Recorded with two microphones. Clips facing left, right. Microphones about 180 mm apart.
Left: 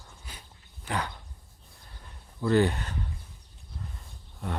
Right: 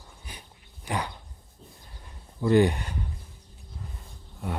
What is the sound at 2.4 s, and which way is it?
Speech, 15° right (ahead or behind).